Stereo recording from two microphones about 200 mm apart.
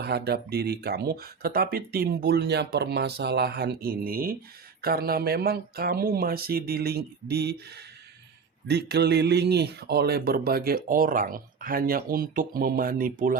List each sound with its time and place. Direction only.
0.0 s speech: 55° right (ahead or behind)
8.6 s speech: 55° right (ahead or behind)